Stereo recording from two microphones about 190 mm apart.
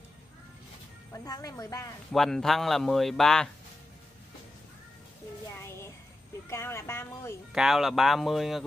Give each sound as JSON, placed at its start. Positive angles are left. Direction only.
{"t": 1.1, "sound": "speech", "side_deg": 20}
{"t": 2.1, "sound": "a man's voice", "side_deg": 0}
{"t": 5.6, "sound": "music", "side_deg": 15}
{"t": 6.5, "sound": "speech", "side_deg": 15}
{"t": 7.5, "sound": "a man's voice", "side_deg": 0}